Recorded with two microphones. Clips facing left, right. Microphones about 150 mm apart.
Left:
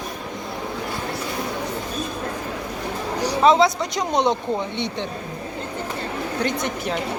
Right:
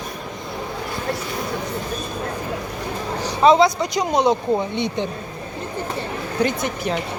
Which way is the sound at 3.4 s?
Centre (ahead or behind).